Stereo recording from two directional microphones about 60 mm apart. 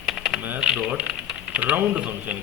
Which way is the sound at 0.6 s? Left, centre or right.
Centre.